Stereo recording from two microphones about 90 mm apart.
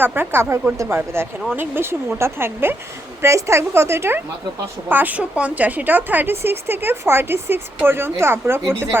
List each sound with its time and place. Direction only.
0.0 s a woman's voice: 25° right (ahead or behind)